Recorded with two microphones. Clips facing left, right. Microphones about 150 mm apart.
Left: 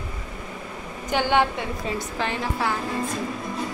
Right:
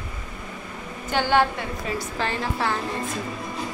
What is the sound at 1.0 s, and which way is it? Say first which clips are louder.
A woman's voice: even; 15° left (ahead or behind).